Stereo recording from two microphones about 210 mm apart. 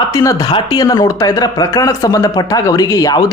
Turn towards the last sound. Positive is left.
turn(degrees=20)  # may be behind; listen again after turning